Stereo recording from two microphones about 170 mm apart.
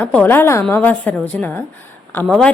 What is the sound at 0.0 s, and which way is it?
A woman's voice, 10° left (ahead or behind).